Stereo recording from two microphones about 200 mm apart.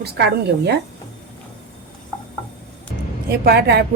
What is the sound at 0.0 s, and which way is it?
Speech, 55° right (ahead or behind).